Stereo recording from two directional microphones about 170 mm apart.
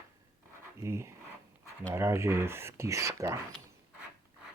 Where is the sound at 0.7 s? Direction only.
15° right (ahead or behind).